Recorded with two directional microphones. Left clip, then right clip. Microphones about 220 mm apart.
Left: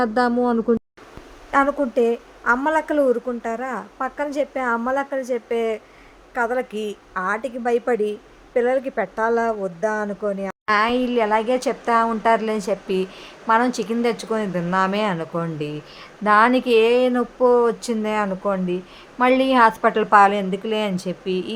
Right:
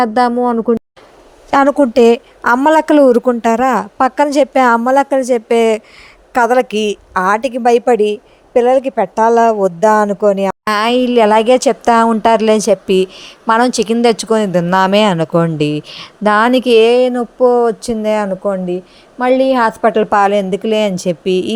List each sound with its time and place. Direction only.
0.0 s speech: 25° right (ahead or behind)
1.5 s a woman's voice: 40° right (ahead or behind)